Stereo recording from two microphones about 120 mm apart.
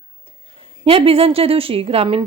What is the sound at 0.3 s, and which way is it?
A woman's voice, 50° right (ahead or behind).